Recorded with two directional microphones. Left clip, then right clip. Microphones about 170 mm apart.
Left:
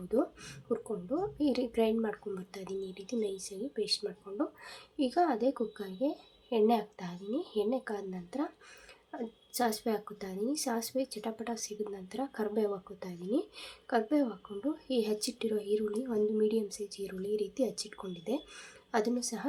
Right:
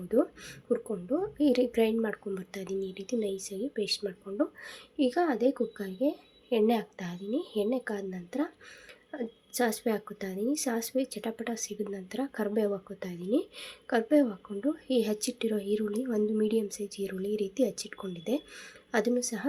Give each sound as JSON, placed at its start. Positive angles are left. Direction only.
{"t": 0.1, "sound": "a woman's voice", "side_deg": -15}